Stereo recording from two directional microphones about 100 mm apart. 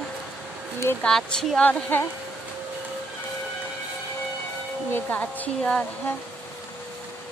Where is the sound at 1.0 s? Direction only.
10° left (ahead or behind).